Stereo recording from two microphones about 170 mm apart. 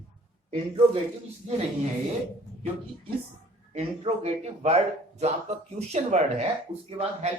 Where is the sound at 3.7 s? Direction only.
40° right (ahead or behind).